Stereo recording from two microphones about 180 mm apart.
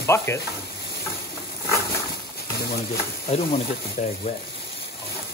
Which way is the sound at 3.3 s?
40° left (ahead or behind).